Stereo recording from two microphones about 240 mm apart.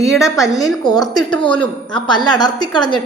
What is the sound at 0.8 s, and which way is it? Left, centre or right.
A woman's voice, centre.